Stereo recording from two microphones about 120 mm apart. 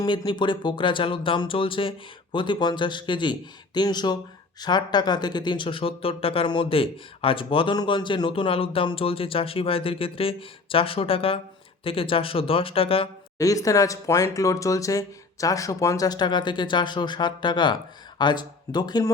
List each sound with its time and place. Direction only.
0.0 s speech: 35° left (ahead or behind); by 13.1 s 50° left (ahead or behind)
13.4 s speech: 30° left (ahead or behind)